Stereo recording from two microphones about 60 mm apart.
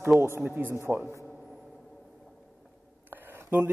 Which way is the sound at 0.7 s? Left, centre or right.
Right.